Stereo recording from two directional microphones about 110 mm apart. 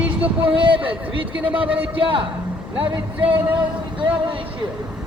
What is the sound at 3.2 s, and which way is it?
Speech, 15° right (ahead or behind).